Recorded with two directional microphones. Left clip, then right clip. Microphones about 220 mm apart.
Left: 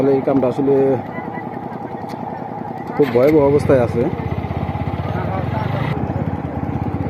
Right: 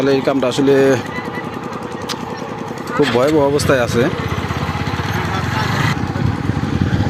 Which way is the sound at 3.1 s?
25° right (ahead or behind).